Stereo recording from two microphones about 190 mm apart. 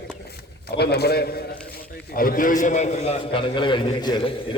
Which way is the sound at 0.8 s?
60° left (ahead or behind).